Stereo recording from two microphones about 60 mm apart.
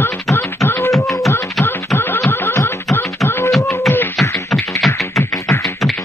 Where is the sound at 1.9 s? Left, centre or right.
Left.